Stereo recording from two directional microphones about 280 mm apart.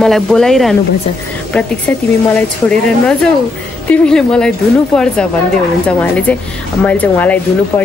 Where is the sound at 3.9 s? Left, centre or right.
Centre.